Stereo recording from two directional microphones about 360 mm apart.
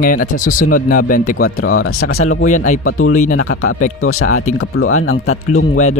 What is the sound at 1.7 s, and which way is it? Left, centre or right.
Speech, left.